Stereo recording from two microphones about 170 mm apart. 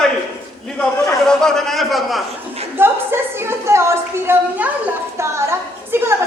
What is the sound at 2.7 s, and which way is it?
A woman's voice, 15° right (ahead or behind).